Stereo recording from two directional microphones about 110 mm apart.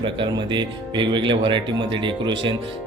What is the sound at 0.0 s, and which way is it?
Speech, 45° right (ahead or behind).